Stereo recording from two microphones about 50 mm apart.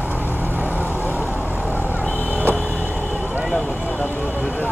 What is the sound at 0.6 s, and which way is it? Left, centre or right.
Vehicle, right.